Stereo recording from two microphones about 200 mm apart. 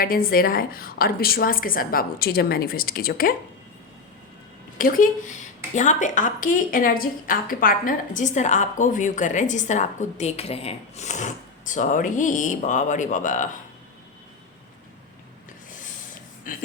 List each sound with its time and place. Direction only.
0.0 s a woman's voice: 45° left (ahead or behind)
4.8 s a woman's voice: 40° left (ahead or behind)
16.5 s a woman's voice: 45° left (ahead or behind)